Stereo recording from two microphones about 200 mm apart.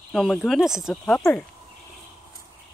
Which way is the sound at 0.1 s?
Centre (ahead or behind).